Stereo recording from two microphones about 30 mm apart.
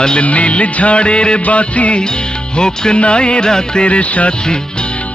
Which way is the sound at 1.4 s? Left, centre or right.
Left.